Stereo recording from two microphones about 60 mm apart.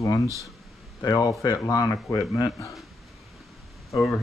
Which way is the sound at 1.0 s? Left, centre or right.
Left.